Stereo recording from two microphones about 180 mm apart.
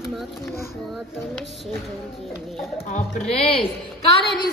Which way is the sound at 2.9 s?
35° left (ahead or behind).